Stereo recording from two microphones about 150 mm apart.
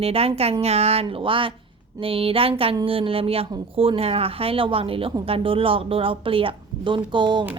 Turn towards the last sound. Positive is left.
turn(degrees=-30)  # may be behind; listen again after turning